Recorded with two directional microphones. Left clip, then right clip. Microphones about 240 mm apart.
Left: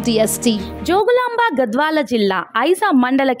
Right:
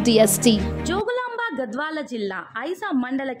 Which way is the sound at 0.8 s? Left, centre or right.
Left.